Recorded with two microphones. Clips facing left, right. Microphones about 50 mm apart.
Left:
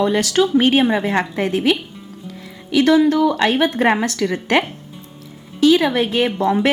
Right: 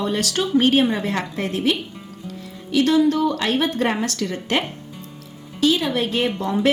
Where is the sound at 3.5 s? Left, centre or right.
Left.